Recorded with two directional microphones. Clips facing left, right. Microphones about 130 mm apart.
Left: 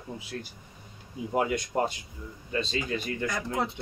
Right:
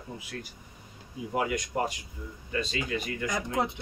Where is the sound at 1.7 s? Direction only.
30° left (ahead or behind).